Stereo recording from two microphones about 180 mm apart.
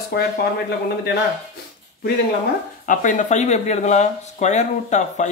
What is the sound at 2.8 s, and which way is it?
Speech, 45° left (ahead or behind).